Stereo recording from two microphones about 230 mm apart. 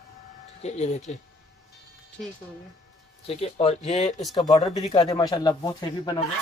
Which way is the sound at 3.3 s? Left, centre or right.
Left.